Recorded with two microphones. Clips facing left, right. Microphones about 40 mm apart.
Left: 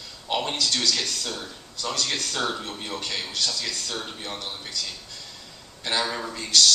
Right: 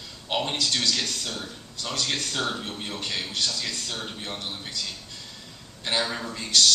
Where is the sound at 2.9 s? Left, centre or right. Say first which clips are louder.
Left 1 dB; centre.